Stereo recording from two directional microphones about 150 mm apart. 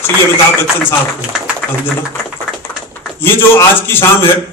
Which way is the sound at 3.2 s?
15° left (ahead or behind).